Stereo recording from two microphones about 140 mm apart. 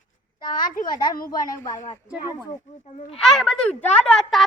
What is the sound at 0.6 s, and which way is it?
Speech, 85° left.